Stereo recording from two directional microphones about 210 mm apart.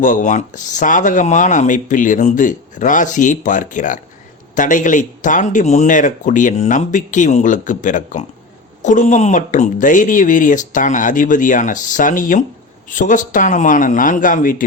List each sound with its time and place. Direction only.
0.0 s speech: 35° left (ahead or behind)